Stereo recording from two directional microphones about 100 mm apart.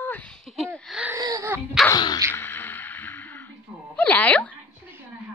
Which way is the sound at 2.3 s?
20° left (ahead or behind).